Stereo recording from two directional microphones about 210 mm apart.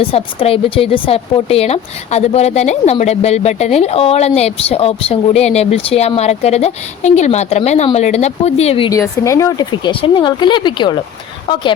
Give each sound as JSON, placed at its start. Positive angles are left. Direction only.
{"t": 0.0, "sound": "a woman's voice", "side_deg": 25}
{"t": 8.9, "sound": "speech", "side_deg": 15}